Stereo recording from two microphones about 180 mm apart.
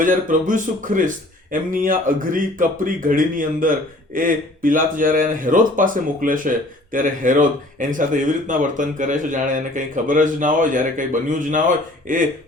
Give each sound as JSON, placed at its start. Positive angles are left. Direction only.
{"t": 0.0, "sound": "speech", "side_deg": -45}